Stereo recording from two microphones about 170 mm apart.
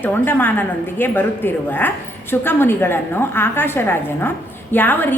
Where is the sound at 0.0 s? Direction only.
10° left (ahead or behind).